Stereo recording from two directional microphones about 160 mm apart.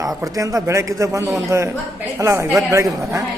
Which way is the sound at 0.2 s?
20° right (ahead or behind).